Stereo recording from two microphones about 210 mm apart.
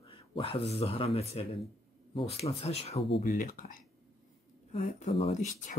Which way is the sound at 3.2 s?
40° left (ahead or behind).